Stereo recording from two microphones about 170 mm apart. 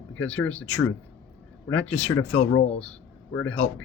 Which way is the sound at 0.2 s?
5° left (ahead or behind).